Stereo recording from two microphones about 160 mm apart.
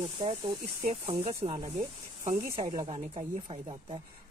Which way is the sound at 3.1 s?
35° right (ahead or behind).